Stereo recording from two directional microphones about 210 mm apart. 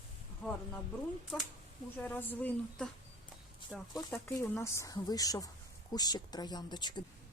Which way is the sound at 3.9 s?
15° left (ahead or behind).